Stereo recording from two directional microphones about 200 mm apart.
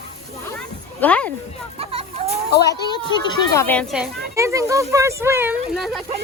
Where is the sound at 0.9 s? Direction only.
5° left (ahead or behind).